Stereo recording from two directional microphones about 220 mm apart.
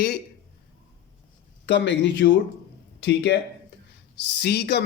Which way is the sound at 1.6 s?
55° left (ahead or behind).